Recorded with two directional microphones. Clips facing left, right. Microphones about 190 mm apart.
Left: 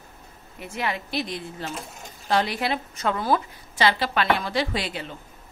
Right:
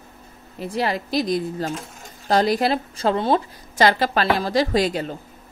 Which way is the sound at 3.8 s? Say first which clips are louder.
Right 4 dB; 45° right (ahead or behind).